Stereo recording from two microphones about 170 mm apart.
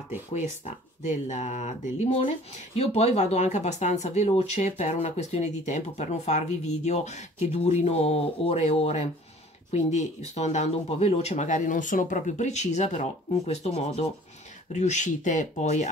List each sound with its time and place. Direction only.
1.0 s speech: 45° left (ahead or behind)